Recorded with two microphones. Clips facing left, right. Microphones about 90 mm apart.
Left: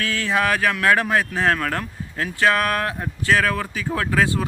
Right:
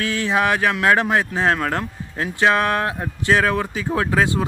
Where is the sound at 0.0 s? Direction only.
20° right (ahead or behind).